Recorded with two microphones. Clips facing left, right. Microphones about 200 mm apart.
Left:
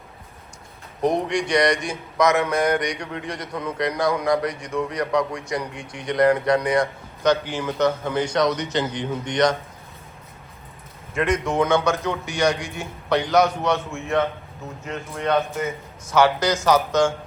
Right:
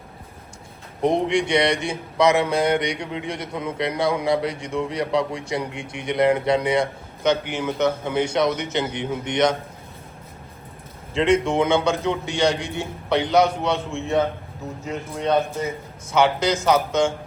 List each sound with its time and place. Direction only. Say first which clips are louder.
1.0 s speech: right 2 dB; 25° right (ahead or behind)
11.1 s a man's voice: right 3 dB; 25° right (ahead or behind)